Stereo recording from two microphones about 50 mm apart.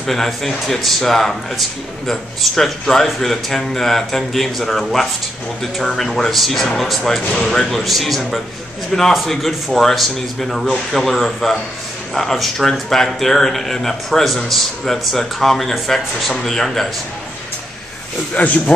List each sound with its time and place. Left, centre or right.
0.0 s speech: centre
18.4 s speech: left